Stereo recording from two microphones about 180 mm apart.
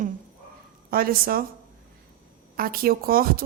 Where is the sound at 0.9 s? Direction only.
55° right (ahead or behind).